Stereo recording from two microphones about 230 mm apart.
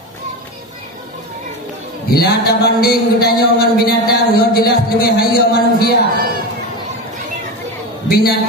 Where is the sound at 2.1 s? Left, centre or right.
Left.